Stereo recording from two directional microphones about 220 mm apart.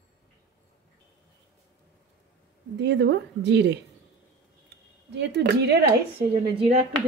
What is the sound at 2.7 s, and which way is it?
Speech, 50° right (ahead or behind).